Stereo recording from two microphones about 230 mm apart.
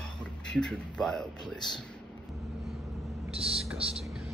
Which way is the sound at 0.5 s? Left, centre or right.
Centre.